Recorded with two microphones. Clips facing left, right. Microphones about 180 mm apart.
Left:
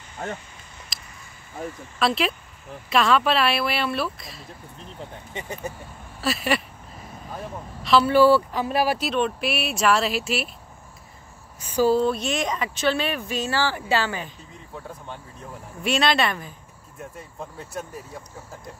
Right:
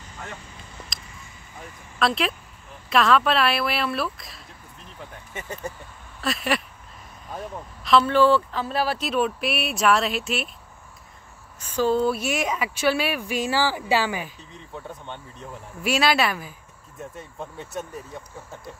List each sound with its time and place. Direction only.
2.0 s speech: centre (ahead or behind)
4.9 s speech: 15° left (ahead or behind)
6.2 s speech: centre (ahead or behind)
9.0 s speech: centre (ahead or behind)
11.6 s speech: 10° left (ahead or behind)
12.0 s speech: 5° right (ahead or behind)
14.7 s speech: 5° left (ahead or behind)